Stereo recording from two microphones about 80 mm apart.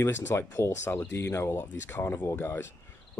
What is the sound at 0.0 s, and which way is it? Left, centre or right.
Speech, left.